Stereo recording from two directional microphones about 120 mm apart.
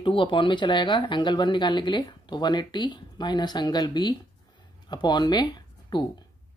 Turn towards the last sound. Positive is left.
turn(degrees=35)  # may be behind; listen again after turning